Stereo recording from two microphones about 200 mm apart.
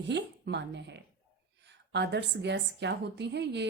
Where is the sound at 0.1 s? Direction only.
60° right (ahead or behind).